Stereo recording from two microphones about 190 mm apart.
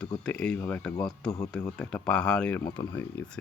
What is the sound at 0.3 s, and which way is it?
Speech, 5° left (ahead or behind).